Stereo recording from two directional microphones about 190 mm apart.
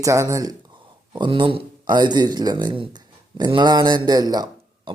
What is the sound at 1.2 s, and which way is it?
Speech, 25° right (ahead or behind).